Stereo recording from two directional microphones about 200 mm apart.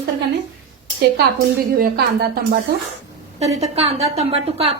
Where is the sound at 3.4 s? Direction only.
35° right (ahead or behind).